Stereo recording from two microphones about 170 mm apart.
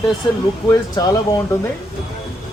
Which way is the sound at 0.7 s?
20° left (ahead or behind).